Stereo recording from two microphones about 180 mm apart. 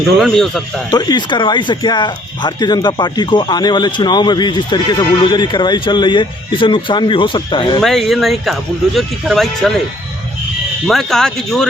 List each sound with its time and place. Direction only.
0.2 s speech: centre (ahead or behind)
0.9 s speech: 20° left (ahead or behind)
7.8 s speech: centre (ahead or behind)
10.8 s speech: centre (ahead or behind)